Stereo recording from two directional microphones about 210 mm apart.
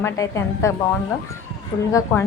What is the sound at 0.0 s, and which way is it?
Speech, 15° left (ahead or behind).